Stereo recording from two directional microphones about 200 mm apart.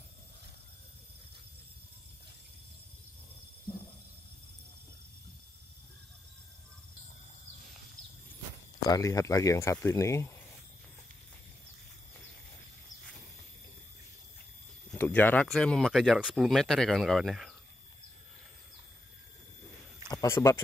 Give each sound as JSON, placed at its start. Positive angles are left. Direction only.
{"t": 8.8, "sound": "speech", "side_deg": 15}
{"t": 14.9, "sound": "speech", "side_deg": 10}
{"t": 20.1, "sound": "speech", "side_deg": 20}